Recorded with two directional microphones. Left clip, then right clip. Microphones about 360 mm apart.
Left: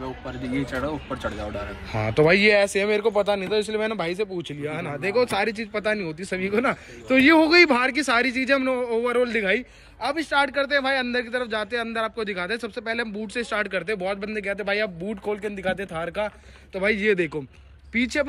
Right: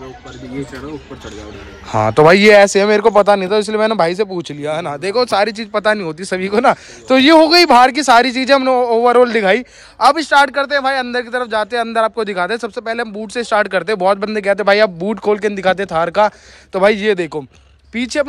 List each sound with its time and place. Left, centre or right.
1.9 s speech: centre
2.4 s speech: right
3.7 s speech: centre
4.0 s speech: right
4.6 s speech: centre